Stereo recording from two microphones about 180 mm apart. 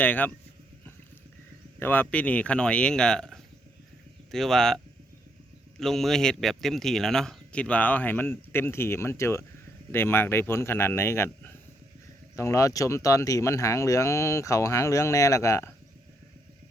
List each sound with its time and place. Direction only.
0.0 s speech: 10° left (ahead or behind)
1.8 s speech: 10° left (ahead or behind)
5.8 s speech: centre (ahead or behind)